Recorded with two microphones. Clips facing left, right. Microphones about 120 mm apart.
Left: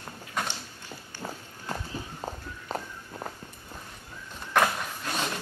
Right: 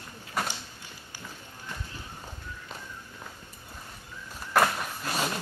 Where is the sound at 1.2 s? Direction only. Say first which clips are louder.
Left 7 dB; 45° left (ahead or behind).